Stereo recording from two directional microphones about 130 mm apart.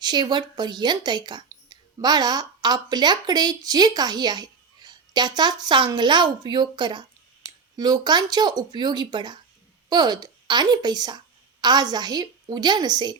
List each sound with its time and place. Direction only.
0.0 s speech: 35° right (ahead or behind)